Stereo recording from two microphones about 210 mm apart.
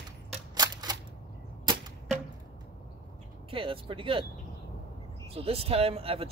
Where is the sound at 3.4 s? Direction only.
25° right (ahead or behind).